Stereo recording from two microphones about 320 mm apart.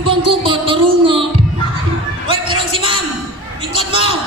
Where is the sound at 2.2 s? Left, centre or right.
Centre.